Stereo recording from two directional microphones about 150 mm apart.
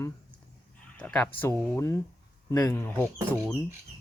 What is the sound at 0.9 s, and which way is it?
Speech, 5° left (ahead or behind).